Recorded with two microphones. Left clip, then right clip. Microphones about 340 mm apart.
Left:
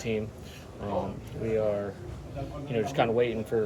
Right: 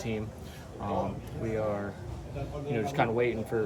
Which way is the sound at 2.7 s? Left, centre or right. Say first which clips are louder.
Left 3 dB; centre.